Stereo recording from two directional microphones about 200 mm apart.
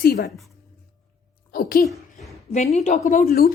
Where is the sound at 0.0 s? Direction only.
50° left (ahead or behind).